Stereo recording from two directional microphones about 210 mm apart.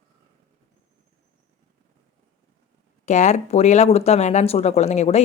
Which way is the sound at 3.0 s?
35° left (ahead or behind).